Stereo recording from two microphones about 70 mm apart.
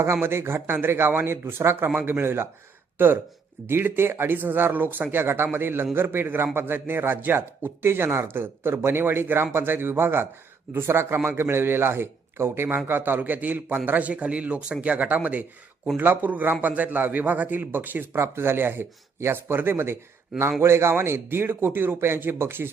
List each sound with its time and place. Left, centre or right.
0.0 s speech: right
3.7 s a man's voice: right